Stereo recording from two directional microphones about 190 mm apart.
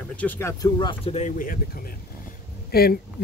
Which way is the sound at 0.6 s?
25° left (ahead or behind).